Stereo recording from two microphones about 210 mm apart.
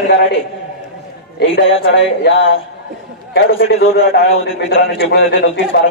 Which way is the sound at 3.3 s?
65° left (ahead or behind).